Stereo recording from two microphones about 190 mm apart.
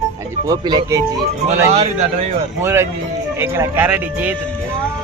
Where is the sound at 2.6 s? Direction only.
15° right (ahead or behind).